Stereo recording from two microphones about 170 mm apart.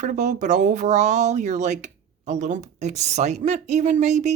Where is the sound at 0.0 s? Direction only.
45° right (ahead or behind).